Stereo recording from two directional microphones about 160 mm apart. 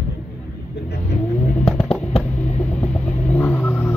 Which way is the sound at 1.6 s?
35° left (ahead or behind).